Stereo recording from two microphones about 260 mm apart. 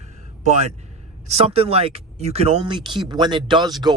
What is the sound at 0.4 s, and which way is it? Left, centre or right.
A man's voice, right.